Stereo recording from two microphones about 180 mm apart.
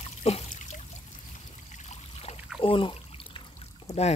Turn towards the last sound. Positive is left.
turn(degrees=35)  # may be behind; listen again after turning